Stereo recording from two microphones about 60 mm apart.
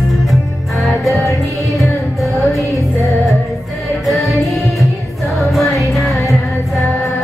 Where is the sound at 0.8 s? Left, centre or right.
Centre.